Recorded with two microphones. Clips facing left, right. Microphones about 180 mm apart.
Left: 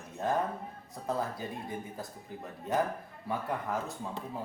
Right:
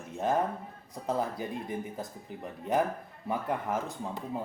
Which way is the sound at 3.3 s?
20° right (ahead or behind).